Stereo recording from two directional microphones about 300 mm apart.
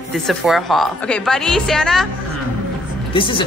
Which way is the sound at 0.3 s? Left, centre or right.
Centre.